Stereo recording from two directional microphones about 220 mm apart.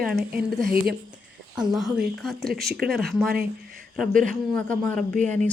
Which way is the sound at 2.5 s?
45° right (ahead or behind).